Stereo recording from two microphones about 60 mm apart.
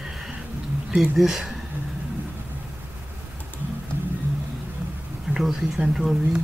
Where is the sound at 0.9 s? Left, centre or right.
Centre.